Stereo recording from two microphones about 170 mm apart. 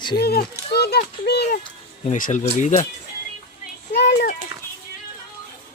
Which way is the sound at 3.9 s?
75° left (ahead or behind).